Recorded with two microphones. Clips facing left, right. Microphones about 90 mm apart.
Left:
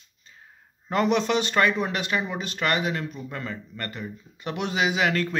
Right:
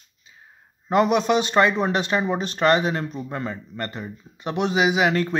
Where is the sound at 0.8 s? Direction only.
20° right (ahead or behind).